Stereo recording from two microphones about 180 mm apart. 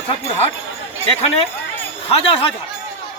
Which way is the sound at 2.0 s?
30° left (ahead or behind).